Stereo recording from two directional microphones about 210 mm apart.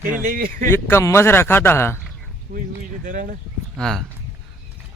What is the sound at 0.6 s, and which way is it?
Speech, 10° left (ahead or behind).